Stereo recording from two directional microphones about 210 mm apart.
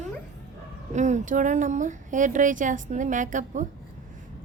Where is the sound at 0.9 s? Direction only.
35° right (ahead or behind).